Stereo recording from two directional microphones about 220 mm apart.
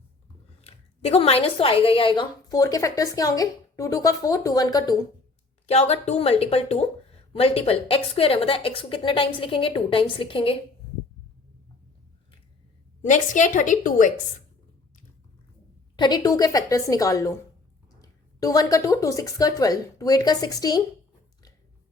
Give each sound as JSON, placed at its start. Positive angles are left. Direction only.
{"t": 0.6, "sound": "a woman's voice", "side_deg": 25}
{"t": 5.6, "sound": "a woman's voice", "side_deg": 30}
{"t": 13.1, "sound": "a woman's voice", "side_deg": 35}
{"t": 16.0, "sound": "a woman's voice", "side_deg": 20}